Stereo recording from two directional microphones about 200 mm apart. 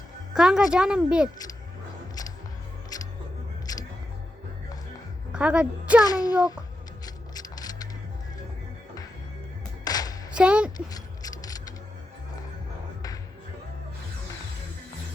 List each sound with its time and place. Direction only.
0.3 s a woman's voice: 5° right (ahead or behind)
2.9 s music: 20° left (ahead or behind)
5.3 s a woman's voice: 5° right (ahead or behind)
6.1 s a child's voice: 20° left (ahead or behind)
7.0 s mechanisms: 20° left (ahead or behind)
9.8 s music: 20° left (ahead or behind)
10.3 s speech: 5° right (ahead or behind)
10.8 s mechanisms: 20° left (ahead or behind)